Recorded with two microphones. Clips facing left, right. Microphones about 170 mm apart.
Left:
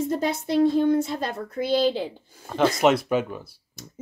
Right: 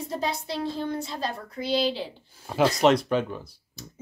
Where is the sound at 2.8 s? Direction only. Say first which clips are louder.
Even; 5° left (ahead or behind).